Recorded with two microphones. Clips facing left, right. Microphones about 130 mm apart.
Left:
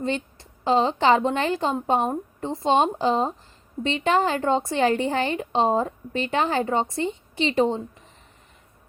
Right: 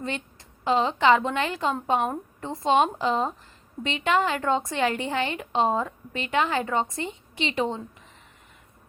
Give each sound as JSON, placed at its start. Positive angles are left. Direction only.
{"t": 0.6, "sound": "a woman's voice", "side_deg": 35}